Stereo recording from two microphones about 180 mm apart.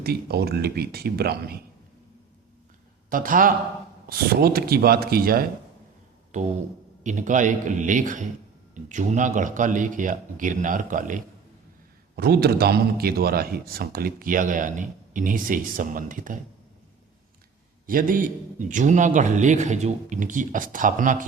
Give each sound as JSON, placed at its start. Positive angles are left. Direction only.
{"t": 0.0, "sound": "a man's voice", "side_deg": -60}
{"t": 3.1, "sound": "a man's voice", "side_deg": -50}
{"t": 6.3, "sound": "a man's voice", "side_deg": -45}
{"t": 12.1, "sound": "a man's voice", "side_deg": -60}
{"t": 17.8, "sound": "a man's voice", "side_deg": -50}